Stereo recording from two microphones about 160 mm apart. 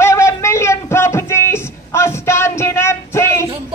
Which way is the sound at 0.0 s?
15° left (ahead or behind).